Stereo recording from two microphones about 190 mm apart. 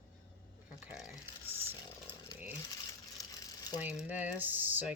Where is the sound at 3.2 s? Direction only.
20° left (ahead or behind).